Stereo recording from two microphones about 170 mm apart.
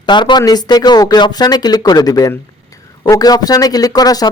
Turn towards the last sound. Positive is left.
turn(degrees=20)  # may be behind; listen again after turning